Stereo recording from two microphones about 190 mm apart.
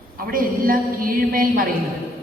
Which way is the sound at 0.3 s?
50° right (ahead or behind).